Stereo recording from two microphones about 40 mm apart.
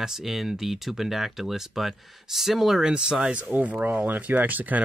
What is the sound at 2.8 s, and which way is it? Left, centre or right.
Speech, centre.